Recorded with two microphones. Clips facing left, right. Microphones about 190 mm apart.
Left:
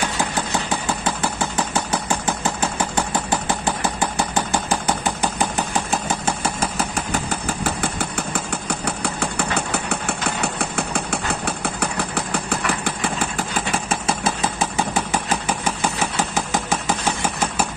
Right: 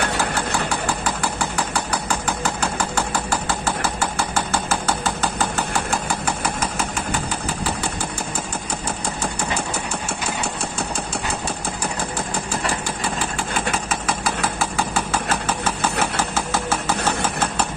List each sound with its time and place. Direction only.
0.2 s engine: 20° left (ahead or behind)
9.0 s engine: 65° left (ahead or behind)
12.3 s engine: 60° left (ahead or behind)
13.8 s engine: 25° left (ahead or behind)